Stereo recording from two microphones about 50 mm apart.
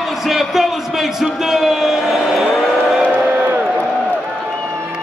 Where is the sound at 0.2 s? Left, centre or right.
Centre.